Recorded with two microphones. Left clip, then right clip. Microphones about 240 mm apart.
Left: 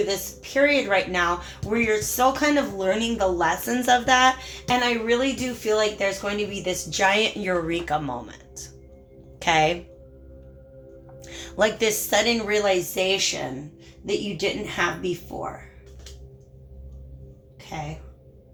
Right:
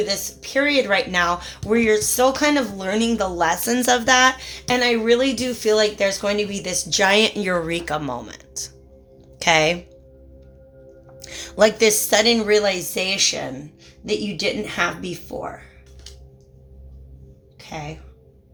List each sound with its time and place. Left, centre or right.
0.1 s a woman's voice: right
11.3 s a woman's voice: right